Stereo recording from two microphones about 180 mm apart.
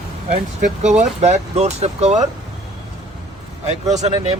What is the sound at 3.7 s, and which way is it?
Speech, 40° right (ahead or behind).